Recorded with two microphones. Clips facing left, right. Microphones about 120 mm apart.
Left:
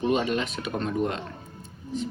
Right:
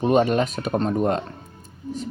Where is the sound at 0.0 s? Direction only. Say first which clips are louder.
Right 6 dB; 45° right (ahead or behind).